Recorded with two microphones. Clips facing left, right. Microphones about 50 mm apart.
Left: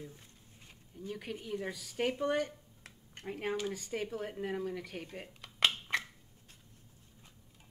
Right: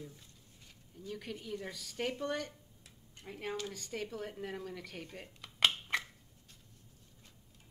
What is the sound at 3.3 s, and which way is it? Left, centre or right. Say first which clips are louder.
Speech: left 5 dB; left.